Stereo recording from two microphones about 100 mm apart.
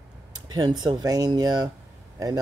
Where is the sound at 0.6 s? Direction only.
45° right (ahead or behind).